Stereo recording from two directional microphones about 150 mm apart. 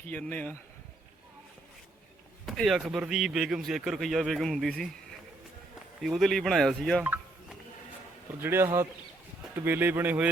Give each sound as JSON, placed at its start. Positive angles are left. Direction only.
{"t": 0.1, "sound": "speech", "side_deg": 10}
{"t": 2.5, "sound": "speech", "side_deg": 0}
{"t": 6.0, "sound": "speech", "side_deg": 0}
{"t": 8.4, "sound": "speech", "side_deg": -15}